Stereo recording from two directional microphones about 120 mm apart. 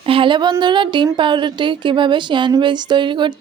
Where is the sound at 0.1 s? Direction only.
45° right (ahead or behind).